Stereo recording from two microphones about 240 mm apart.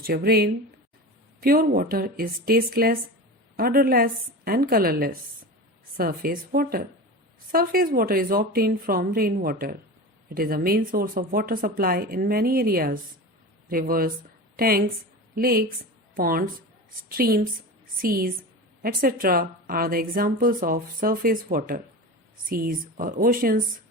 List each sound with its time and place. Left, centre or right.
0.1 s a woman's voice: right